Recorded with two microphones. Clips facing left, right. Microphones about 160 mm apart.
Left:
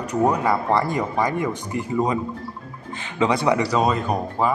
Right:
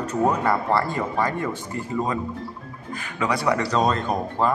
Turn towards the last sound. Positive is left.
turn(degrees=10)  # may be behind; listen again after turning